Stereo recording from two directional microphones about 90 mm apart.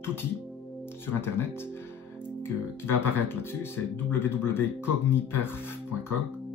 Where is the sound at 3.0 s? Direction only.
25° left (ahead or behind).